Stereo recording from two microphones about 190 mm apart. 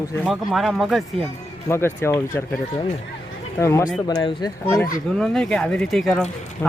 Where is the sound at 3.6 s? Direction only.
15° left (ahead or behind).